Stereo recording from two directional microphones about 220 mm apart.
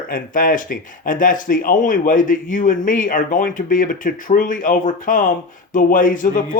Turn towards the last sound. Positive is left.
turn(degrees=40)  # may be behind; listen again after turning